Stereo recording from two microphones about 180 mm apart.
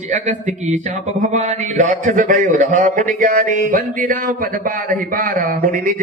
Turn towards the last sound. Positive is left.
turn(degrees=-50)  # may be behind; listen again after turning